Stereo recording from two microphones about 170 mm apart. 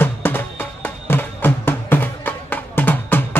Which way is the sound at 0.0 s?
10° left (ahead or behind).